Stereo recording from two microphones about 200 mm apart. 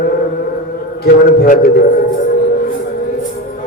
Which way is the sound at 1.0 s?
45° left (ahead or behind).